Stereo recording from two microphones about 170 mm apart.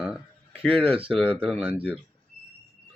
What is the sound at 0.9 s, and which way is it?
Speech, 30° right (ahead or behind).